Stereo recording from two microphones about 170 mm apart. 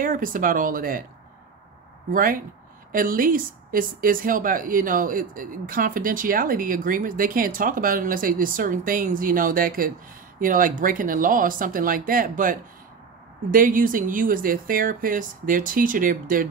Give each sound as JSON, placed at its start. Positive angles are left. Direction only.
{"t": 0.0, "sound": "a woman's voice", "side_deg": -55}
{"t": 2.1, "sound": "a woman's voice", "side_deg": -55}